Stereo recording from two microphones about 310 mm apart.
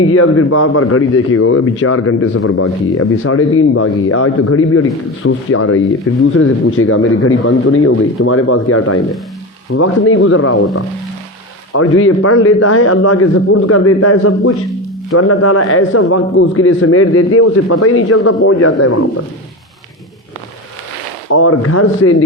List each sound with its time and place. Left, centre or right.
0.0 s a man's voice: left
11.7 s a man's voice: left
21.2 s a man's voice: left